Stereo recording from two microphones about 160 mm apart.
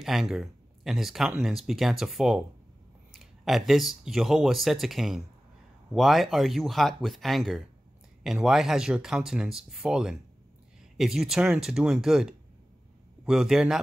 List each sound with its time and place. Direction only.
0.0 s speech: centre (ahead or behind)